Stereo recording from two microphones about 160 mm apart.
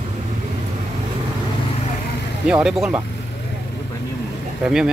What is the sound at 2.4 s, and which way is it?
Speech, 5° right (ahead or behind).